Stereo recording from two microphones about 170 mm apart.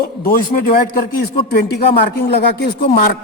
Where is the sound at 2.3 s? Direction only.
75° left (ahead or behind).